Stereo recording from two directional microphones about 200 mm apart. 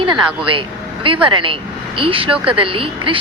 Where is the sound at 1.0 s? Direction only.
25° right (ahead or behind).